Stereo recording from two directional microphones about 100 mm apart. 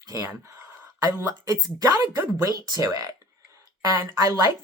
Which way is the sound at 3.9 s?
35° right (ahead or behind).